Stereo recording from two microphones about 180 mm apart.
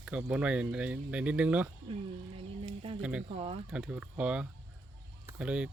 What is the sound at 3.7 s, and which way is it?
Speech, 5° right (ahead or behind).